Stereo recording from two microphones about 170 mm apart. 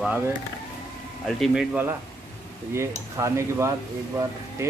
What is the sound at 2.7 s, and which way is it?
Speech, 15° right (ahead or behind).